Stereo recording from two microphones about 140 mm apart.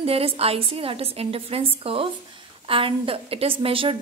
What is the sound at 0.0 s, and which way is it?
A woman's voice, 45° right (ahead or behind).